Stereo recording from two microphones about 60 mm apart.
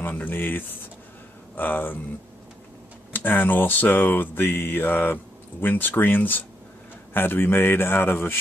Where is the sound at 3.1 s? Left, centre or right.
Left.